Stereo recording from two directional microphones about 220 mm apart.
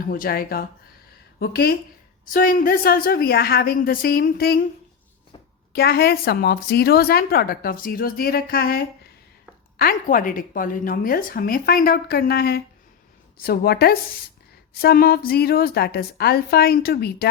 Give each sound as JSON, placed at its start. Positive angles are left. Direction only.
{"t": 0.1, "sound": "a woman's voice", "side_deg": 40}
{"t": 5.7, "sound": "a woman's voice", "side_deg": 45}